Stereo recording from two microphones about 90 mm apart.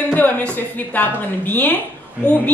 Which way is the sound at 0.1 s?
20° left (ahead or behind).